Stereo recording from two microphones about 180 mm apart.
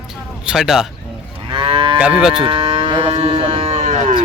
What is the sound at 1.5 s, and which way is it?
Moo, 30° right (ahead or behind).